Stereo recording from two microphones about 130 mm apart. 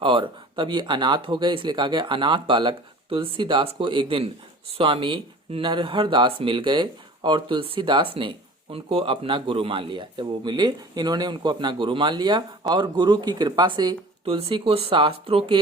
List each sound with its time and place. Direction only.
0.0 s a man's voice: 40° right (ahead or behind)